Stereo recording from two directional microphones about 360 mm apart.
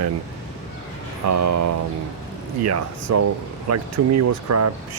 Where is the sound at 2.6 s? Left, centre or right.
Right.